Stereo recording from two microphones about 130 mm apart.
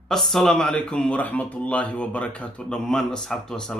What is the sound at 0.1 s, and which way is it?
Speech, centre (ahead or behind).